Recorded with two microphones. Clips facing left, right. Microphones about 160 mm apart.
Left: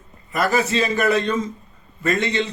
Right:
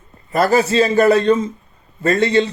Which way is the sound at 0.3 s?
30° right (ahead or behind).